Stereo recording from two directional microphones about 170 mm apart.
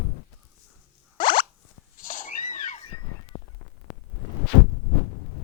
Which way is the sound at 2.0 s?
50° left (ahead or behind).